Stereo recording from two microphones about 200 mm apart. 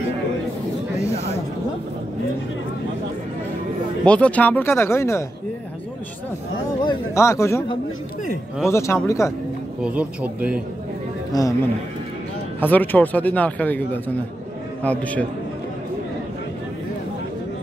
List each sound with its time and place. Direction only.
4.0 s speech: 5° left (ahead or behind)
6.8 s speech: 20° left (ahead or behind)
8.6 s speech: 15° left (ahead or behind)
9.8 s speech: 5° right (ahead or behind)
11.3 s speech: 20° left (ahead or behind)
12.5 s speech: 10° left (ahead or behind)